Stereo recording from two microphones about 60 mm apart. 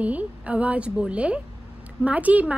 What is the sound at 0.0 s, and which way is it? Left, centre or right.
A woman's voice, right.